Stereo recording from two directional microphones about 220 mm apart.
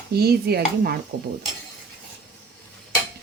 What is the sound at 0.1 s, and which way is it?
Speech, 45° right (ahead or behind).